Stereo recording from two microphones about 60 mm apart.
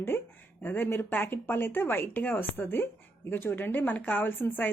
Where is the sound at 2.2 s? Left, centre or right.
Left.